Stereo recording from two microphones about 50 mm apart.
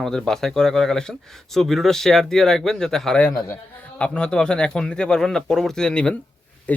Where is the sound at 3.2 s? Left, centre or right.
Left.